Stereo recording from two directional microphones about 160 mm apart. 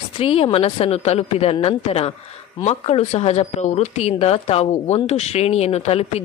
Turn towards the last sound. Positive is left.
turn(degrees=40)  # may be behind; listen again after turning